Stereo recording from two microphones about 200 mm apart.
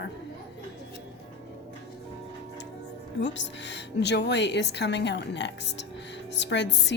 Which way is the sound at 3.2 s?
65° left (ahead or behind).